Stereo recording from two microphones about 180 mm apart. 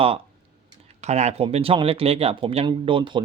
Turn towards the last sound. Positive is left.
turn(degrees=-25)  # may be behind; listen again after turning